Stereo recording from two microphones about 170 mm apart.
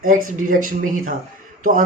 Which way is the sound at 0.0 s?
55° right (ahead or behind).